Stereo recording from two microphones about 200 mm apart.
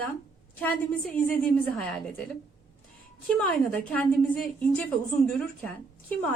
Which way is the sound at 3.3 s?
5° left (ahead or behind).